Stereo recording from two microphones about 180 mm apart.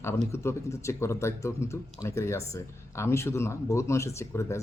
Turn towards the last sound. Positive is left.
turn(degrees=15)  # may be behind; listen again after turning